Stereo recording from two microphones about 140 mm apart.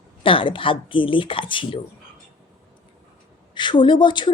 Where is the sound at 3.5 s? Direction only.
35° left (ahead or behind).